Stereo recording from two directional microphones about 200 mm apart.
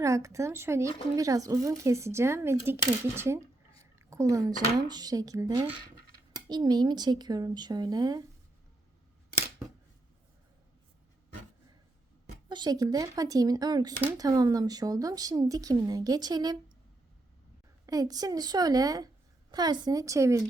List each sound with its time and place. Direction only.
0.0 s speech: 15° right (ahead or behind)
12.5 s speech: 20° right (ahead or behind)
17.8 s speech: 20° right (ahead or behind)